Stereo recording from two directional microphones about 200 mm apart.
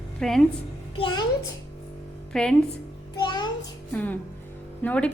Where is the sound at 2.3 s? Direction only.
5° left (ahead or behind).